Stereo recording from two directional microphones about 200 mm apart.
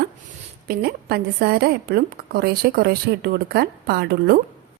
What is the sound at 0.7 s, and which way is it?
A woman's voice, 50° right (ahead or behind).